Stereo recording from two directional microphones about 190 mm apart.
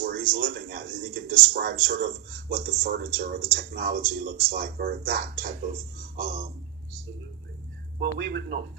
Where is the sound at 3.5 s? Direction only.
55° right (ahead or behind).